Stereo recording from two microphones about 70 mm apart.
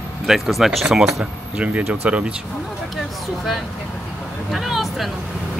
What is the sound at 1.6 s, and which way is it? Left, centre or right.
Speech, right.